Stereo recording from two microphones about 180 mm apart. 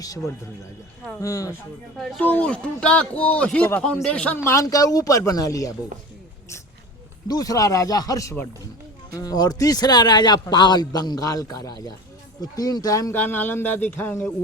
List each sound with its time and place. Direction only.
1.2 s speech: 20° left (ahead or behind)
2.0 s speech: 5° left (ahead or behind)
7.3 s speech: 20° left (ahead or behind)